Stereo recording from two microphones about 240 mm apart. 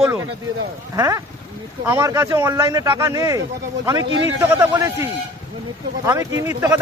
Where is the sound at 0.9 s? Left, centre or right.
Centre.